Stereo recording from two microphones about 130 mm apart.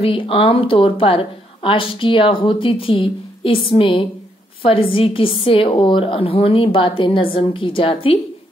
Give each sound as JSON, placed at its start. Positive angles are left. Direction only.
{"t": 0.0, "sound": "a woman's voice", "side_deg": 45}